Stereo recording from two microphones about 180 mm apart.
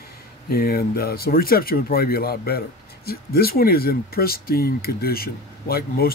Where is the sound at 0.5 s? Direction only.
55° left (ahead or behind).